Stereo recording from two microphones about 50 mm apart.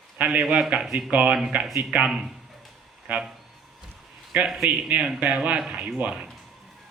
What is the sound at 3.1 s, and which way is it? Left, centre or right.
Speech, right.